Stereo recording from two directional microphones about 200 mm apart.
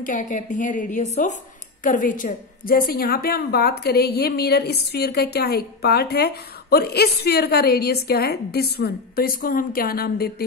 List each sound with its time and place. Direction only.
0.0 s a woman's voice: 40° left (ahead or behind)